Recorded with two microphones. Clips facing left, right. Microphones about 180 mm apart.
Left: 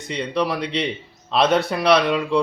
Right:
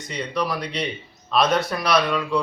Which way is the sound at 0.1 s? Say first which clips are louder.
Left 3 dB; 30° left (ahead or behind).